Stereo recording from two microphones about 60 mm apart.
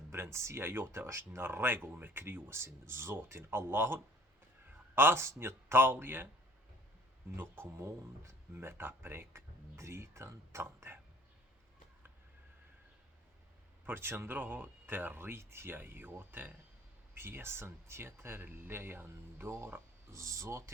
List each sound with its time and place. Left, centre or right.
0.1 s speech: right
7.3 s speech: right
13.8 s speech: right
20.1 s speech: right